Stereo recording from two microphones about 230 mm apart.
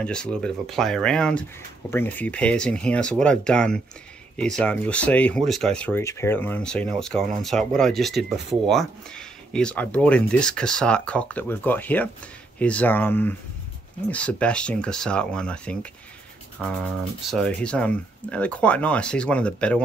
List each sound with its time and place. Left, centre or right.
0.0 s speech: centre